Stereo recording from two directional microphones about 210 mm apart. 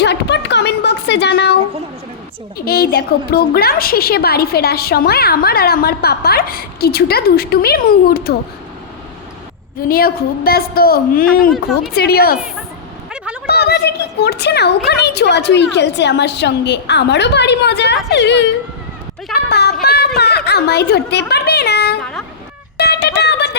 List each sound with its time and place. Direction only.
0.0 s a sound: 55° left (ahead or behind)
2.6 s a woman's voice: 45° left (ahead or behind)
9.9 s a woman's voice: 45° left (ahead or behind)
13.5 s a woman's voice: 50° left (ahead or behind)
19.5 s speech: 50° left (ahead or behind)
19.8 s a sound: 50° left (ahead or behind)
20.1 s speech: 50° left (ahead or behind)
22.8 s music: 50° left (ahead or behind)